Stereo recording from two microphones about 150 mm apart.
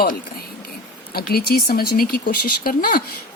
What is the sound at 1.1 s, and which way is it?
Speech, 90° left.